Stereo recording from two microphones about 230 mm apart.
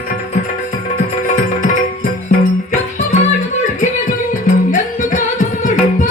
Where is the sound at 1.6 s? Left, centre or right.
Left.